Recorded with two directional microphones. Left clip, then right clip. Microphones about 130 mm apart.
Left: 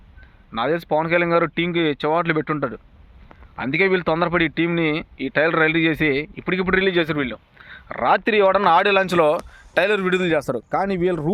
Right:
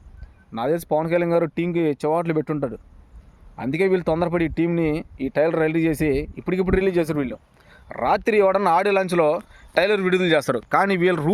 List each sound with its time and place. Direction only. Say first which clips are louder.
0.5 s speech: left 1 dB; 30° right (ahead or behind); by 11.3 s 15° right (ahead or behind)